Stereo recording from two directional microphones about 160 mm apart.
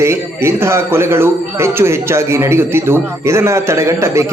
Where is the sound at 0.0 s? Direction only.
15° right (ahead or behind).